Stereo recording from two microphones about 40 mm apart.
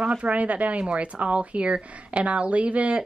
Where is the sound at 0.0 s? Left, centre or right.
Right.